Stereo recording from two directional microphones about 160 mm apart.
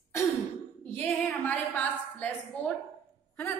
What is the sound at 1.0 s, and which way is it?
Female singing, 10° left (ahead or behind).